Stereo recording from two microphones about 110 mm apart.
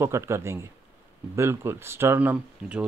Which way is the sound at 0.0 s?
25° right (ahead or behind).